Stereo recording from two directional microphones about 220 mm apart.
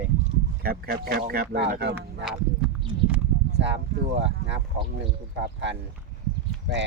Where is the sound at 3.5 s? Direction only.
50° right (ahead or behind).